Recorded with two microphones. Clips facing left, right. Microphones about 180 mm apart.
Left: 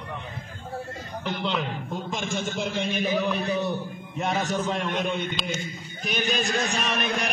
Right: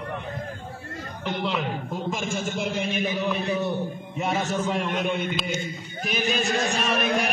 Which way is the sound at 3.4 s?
25° right (ahead or behind).